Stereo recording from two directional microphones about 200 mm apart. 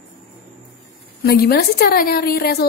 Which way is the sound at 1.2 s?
50° left (ahead or behind).